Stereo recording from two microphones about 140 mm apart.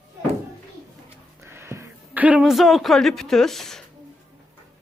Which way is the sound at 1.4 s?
20° right (ahead or behind).